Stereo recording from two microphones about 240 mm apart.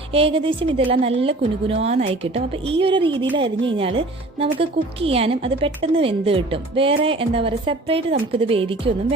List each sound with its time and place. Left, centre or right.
0.1 s speech: right